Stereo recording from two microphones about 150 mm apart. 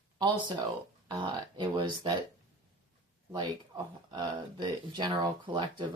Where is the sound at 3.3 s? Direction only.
30° right (ahead or behind).